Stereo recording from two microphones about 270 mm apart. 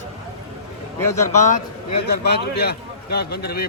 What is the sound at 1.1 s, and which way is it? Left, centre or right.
Speech, left.